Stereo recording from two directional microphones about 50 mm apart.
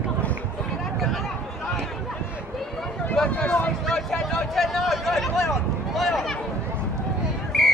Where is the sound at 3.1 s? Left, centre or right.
Left.